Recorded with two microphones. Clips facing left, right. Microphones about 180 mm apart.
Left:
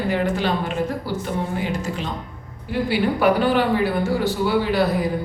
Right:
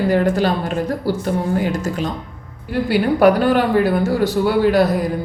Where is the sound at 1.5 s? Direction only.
45° right (ahead or behind).